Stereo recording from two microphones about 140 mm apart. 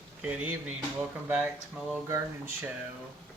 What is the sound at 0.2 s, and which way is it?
Speech, 10° right (ahead or behind).